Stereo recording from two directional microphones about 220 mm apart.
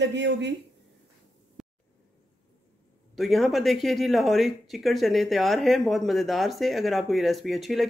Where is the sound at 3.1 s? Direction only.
Centre (ahead or behind).